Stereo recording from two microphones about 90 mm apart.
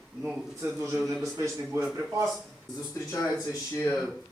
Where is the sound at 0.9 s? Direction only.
Centre (ahead or behind).